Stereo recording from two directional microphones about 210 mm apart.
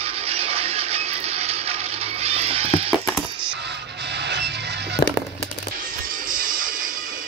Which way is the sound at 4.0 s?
55° right (ahead or behind).